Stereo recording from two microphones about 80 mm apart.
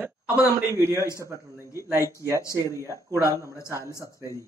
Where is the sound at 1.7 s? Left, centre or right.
Right.